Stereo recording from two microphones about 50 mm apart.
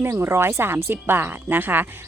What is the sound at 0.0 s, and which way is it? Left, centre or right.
A woman's voice, right.